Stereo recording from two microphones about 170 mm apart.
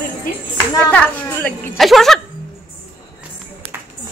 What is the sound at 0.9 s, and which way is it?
A woman's voice, 10° left (ahead or behind).